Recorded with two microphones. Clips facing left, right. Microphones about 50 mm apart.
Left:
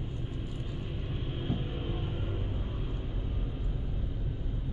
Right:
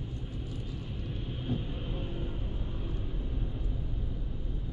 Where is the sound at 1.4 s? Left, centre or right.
Left.